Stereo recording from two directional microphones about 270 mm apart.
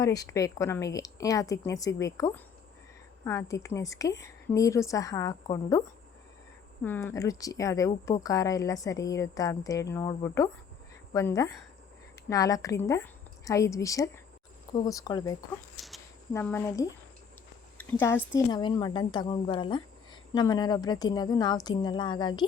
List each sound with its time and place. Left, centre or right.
0.0 s speech: centre
6.8 s speech: centre
15.7 s speech: centre